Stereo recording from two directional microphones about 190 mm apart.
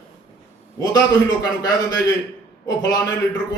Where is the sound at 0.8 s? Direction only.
20° left (ahead or behind).